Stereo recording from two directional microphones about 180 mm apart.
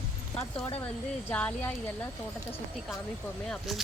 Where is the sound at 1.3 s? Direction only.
10° left (ahead or behind).